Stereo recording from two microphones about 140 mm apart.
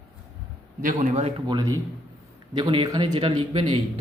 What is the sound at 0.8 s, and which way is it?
Speech, 75° right (ahead or behind).